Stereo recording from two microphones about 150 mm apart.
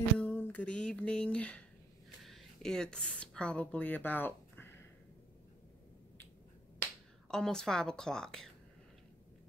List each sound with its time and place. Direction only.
0.2 s a sound: 10° left (ahead or behind)
2.2 s speech: centre (ahead or behind)
6.8 s speech: 5° left (ahead or behind)